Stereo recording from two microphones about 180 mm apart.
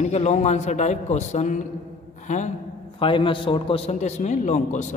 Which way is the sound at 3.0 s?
30° left (ahead or behind).